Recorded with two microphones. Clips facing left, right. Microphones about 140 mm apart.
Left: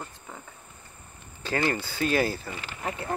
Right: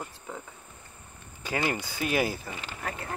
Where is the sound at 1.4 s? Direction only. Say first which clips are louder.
Left 2 dB; 10° right (ahead or behind).